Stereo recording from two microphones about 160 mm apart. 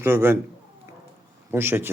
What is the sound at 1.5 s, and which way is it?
Speech, 15° right (ahead or behind).